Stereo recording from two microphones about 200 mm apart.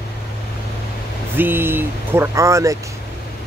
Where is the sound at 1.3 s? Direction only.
10° right (ahead or behind).